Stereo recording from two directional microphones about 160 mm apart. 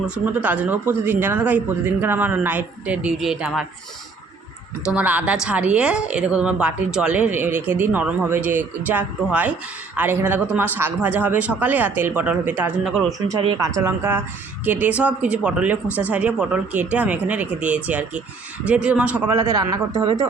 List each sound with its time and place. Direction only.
0.4 s a woman's voice: 10° right (ahead or behind)
4.9 s a woman's voice: 10° right (ahead or behind)
13.1 s a woman's voice: 20° right (ahead or behind)